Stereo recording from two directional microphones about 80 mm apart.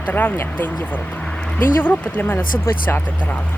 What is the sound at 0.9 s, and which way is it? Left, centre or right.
Vehicle, centre.